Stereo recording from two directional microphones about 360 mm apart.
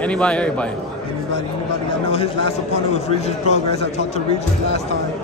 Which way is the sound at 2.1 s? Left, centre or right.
Centre.